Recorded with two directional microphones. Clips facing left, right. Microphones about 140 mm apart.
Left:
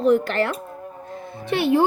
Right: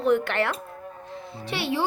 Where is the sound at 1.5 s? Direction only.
50° left (ahead or behind).